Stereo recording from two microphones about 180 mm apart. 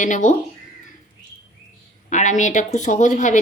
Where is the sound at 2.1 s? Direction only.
40° left (ahead or behind).